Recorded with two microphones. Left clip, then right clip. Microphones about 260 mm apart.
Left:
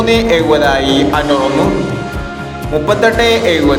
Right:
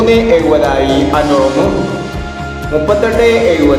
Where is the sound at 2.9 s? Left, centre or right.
Left.